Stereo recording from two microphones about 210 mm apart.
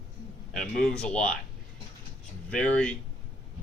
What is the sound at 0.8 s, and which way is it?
Speech, 5° left (ahead or behind).